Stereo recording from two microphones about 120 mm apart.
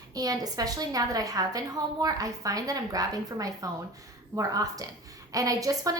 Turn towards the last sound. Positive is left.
turn(degrees=-30)  # may be behind; listen again after turning